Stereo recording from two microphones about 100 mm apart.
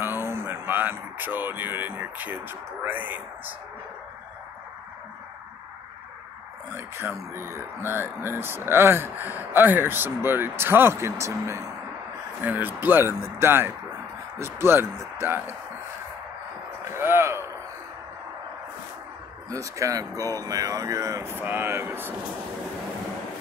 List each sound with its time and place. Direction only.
0.0 s speech: 25° right (ahead or behind)
7.0 s speech: 25° right (ahead or behind)
12.4 s speech: 20° right (ahead or behind)
16.9 s a sound: 25° right (ahead or behind)
19.5 s speech: 35° right (ahead or behind)
21.4 s speech: 20° right (ahead or behind)